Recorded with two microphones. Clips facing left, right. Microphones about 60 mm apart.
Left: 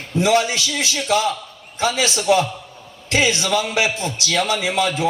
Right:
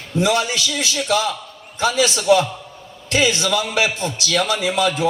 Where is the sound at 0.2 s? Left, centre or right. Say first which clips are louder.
Left 1 dB; left.